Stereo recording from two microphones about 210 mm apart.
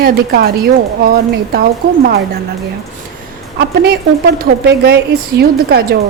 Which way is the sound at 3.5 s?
50° right (ahead or behind).